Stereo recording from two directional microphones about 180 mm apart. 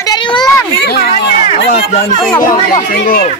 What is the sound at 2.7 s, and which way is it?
Speech, 55° left (ahead or behind).